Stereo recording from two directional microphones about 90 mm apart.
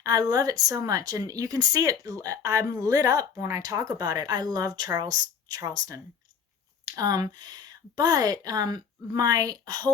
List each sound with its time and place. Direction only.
0.0 s speech: 45° right (ahead or behind)